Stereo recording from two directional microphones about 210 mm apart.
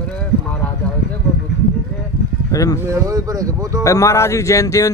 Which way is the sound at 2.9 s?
15° right (ahead or behind).